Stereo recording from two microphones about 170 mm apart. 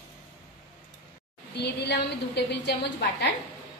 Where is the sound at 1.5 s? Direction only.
75° left (ahead or behind).